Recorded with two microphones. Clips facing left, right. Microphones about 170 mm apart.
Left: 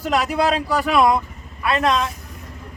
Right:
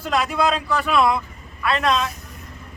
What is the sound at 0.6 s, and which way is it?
Speech, 40° left (ahead or behind).